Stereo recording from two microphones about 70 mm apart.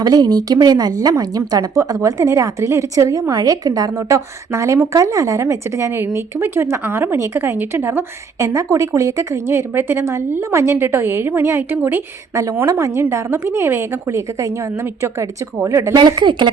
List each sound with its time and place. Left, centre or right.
0.0 s a woman's voice: right
12.3 s a woman's voice: right
16.0 s speech: right